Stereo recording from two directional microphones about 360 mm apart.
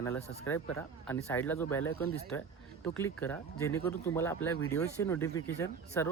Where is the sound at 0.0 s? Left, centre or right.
Centre.